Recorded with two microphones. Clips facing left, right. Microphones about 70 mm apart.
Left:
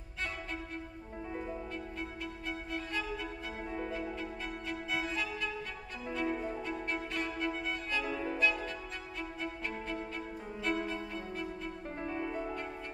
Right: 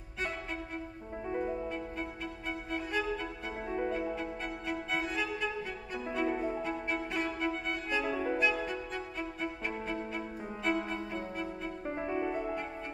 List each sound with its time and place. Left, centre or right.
1.4 s music: centre